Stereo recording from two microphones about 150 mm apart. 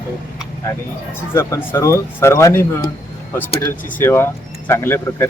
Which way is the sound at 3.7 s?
10° left (ahead or behind).